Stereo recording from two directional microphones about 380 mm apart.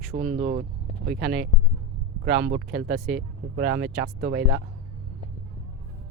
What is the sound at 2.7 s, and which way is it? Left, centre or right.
Speech, centre.